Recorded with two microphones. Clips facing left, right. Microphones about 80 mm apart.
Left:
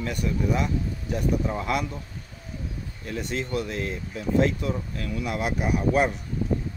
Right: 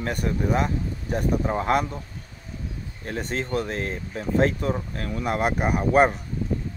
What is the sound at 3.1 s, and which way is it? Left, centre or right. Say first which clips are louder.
Speech: right 2 dB; right.